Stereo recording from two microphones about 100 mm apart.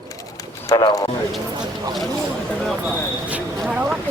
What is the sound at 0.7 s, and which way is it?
Speech, 40° left (ahead or behind).